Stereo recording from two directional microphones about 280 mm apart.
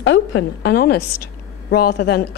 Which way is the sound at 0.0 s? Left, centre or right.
Left.